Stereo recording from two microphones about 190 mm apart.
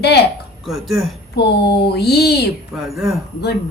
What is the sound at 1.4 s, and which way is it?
Speech, 60° left (ahead or behind).